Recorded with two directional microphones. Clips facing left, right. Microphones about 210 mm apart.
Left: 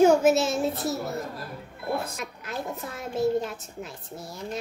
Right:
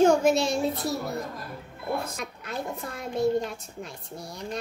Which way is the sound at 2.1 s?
Centre (ahead or behind).